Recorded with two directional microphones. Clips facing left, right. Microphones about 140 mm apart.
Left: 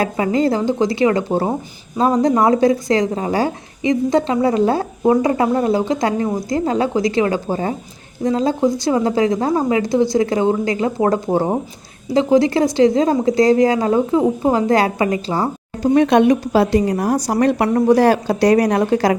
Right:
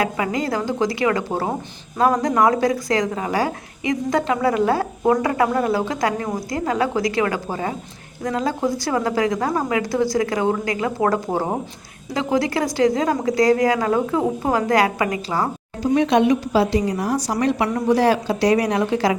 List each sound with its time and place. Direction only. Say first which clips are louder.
0.0 s speech: left 5 dB; 30° left (ahead or behind)
15.8 s a woman's voice: left 4 dB; 55° left (ahead or behind)